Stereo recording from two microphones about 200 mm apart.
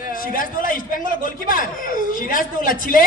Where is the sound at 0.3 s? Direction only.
45° left (ahead or behind).